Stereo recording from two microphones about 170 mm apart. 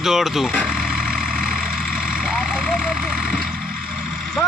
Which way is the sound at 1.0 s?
60° right (ahead or behind).